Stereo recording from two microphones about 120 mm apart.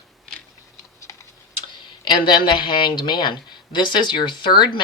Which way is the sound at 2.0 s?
40° left (ahead or behind).